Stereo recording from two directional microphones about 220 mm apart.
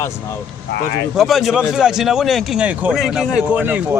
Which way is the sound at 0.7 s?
50° left (ahead or behind).